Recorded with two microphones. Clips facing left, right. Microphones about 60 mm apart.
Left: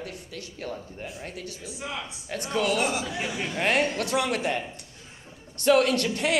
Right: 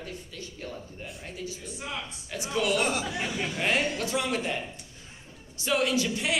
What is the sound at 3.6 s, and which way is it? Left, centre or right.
Speech, left.